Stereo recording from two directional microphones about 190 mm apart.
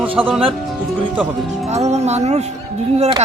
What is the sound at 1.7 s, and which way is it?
Speech, 35° right (ahead or behind).